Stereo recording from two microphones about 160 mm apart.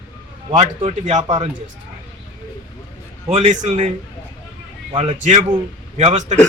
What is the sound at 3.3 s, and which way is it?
Speech, 50° right (ahead or behind).